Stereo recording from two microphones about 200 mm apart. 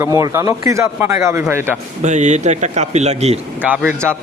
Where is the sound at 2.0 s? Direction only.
35° right (ahead or behind).